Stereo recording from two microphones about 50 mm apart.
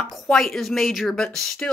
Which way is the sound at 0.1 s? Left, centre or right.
Centre.